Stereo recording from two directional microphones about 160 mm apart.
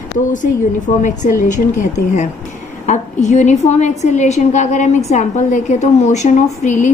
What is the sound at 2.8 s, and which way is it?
A woman's voice, 45° left (ahead or behind).